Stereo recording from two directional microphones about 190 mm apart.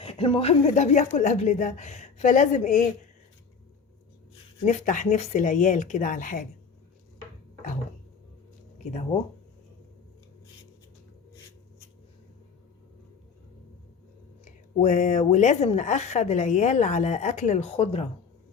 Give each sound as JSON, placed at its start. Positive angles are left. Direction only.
{"t": 0.0, "sound": "a woman's voice", "side_deg": 30}
{"t": 4.6, "sound": "a woman's voice", "side_deg": 40}
{"t": 14.4, "sound": "a woman's voice", "side_deg": 40}